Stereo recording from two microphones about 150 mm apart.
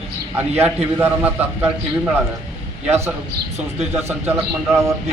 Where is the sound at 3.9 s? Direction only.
15° right (ahead or behind).